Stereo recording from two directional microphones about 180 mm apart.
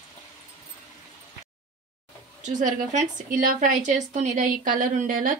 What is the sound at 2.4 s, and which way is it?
A woman's voice, 40° right (ahead or behind).